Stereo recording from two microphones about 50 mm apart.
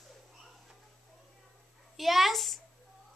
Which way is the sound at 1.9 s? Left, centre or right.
Centre.